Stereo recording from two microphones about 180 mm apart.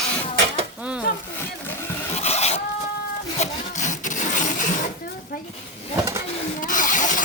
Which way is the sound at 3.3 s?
40° left (ahead or behind).